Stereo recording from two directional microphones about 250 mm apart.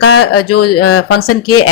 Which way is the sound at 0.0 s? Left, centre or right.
Left.